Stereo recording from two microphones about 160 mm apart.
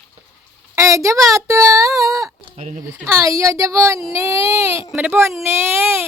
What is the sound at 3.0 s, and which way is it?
Speech, 20° right (ahead or behind).